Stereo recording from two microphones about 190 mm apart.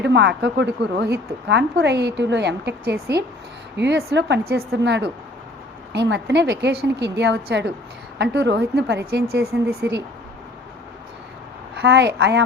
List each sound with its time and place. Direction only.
0.0 s a woman's voice: 65° right (ahead or behind)
11.8 s a woman's voice: 60° right (ahead or behind)